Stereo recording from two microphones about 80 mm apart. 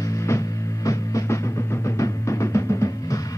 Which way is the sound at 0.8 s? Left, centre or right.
Left.